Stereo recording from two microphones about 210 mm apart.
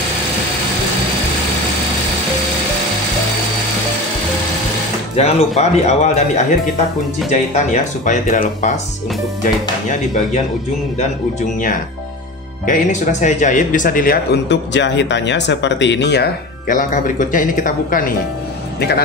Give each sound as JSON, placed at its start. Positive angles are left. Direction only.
{"t": 5.1, "sound": "speech", "side_deg": 30}
{"t": 12.6, "sound": "a man's voice", "side_deg": 35}